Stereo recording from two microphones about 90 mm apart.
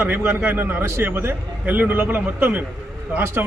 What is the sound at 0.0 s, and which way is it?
A man's voice, 20° right (ahead or behind).